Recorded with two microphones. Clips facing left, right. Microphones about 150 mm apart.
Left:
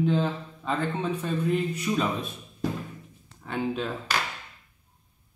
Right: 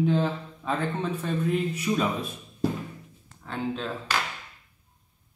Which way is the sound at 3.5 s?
10° left (ahead or behind).